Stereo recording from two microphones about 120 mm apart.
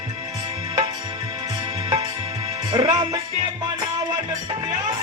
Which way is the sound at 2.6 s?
35° right (ahead or behind).